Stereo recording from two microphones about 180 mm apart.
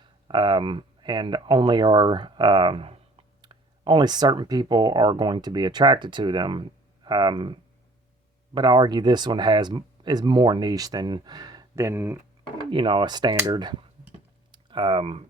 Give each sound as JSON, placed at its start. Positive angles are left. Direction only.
{"t": 0.0, "sound": "speech", "side_deg": -25}
{"t": 12.7, "sound": "speech", "side_deg": -30}